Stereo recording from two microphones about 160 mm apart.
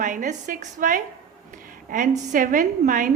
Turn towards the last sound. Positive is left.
turn(degrees=-55)  # may be behind; listen again after turning